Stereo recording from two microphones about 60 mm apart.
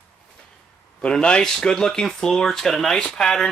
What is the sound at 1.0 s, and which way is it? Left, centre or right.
Speech, centre.